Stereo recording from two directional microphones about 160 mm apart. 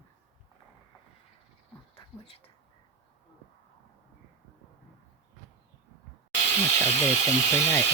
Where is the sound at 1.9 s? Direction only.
35° left (ahead or behind).